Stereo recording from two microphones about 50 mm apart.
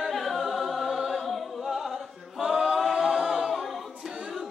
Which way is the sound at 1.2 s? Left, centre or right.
Centre.